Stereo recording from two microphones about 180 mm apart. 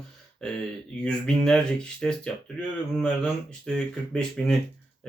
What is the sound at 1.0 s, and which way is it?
Speech, 5° left (ahead or behind).